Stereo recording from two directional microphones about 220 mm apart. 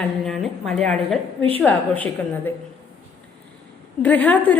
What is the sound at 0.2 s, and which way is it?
A woman's voice, centre (ahead or behind).